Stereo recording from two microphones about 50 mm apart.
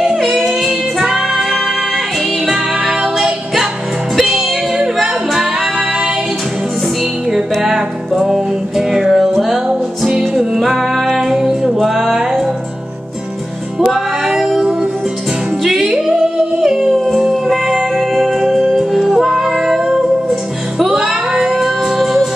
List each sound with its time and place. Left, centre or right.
0.0 s music: centre
3.0 s music: centre
7.5 s music: centre
10.6 s music: centre
13.7 s music: centre
16.6 s howl: centre
17.2 s music: centre